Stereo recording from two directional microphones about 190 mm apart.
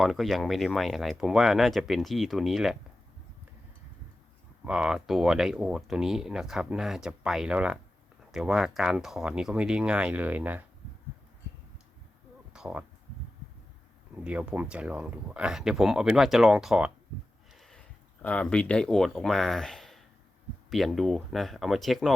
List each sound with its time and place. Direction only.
0.0 s speech: centre (ahead or behind)
4.6 s speech: 5° right (ahead or behind)
12.5 s a sound: 5° right (ahead or behind)
14.3 s speech: 5° right (ahead or behind)